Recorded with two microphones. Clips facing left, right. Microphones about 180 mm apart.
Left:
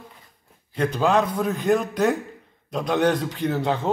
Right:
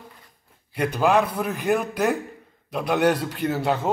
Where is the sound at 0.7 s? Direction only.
10° right (ahead or behind).